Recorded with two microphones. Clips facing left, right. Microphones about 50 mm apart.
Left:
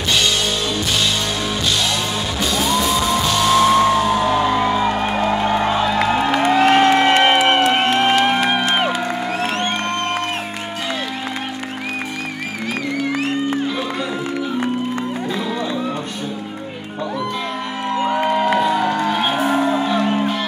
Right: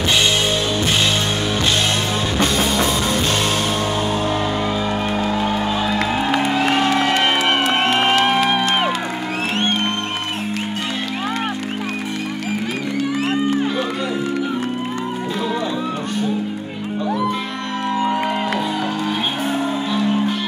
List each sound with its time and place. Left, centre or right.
2.3 s music: right
2.9 s music: centre
3.2 s music: right
3.6 s music: left
5.8 s music: centre
6.6 s music: left
7.2 s music: centre
7.7 s crowd: centre
8.1 s music: centre
18.9 s music: left